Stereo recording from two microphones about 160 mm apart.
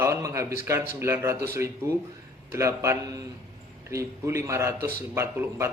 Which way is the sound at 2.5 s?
15° right (ahead or behind).